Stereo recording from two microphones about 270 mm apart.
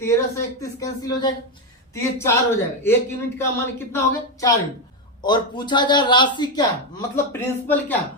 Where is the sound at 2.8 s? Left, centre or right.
Centre.